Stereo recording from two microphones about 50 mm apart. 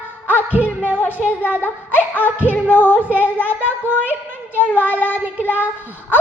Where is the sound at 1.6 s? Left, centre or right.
Left.